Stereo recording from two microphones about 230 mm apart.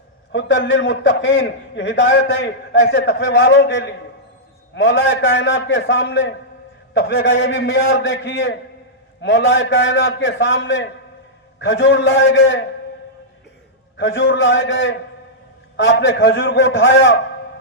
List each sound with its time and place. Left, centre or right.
0.3 s a man's voice: left
13.9 s a man's voice: left